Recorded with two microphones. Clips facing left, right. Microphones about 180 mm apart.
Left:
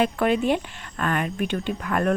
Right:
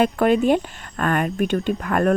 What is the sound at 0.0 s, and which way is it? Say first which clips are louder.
Speech: right 4 dB; 45° right (ahead or behind).